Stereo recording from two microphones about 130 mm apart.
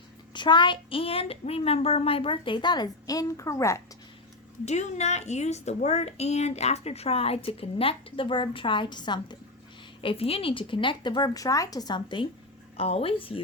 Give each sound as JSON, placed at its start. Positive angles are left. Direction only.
{"t": 0.3, "sound": "speech", "side_deg": 35}
{"t": 4.6, "sound": "speech", "side_deg": 60}
{"t": 10.0, "sound": "a woman's voice", "side_deg": 45}